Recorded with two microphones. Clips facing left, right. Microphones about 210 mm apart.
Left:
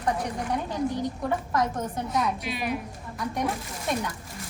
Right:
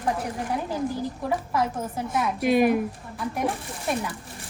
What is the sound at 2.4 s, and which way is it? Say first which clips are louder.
Speech: right 11 dB; 50° right (ahead or behind).